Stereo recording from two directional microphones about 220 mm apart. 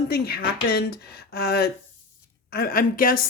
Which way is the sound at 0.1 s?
45° left (ahead or behind).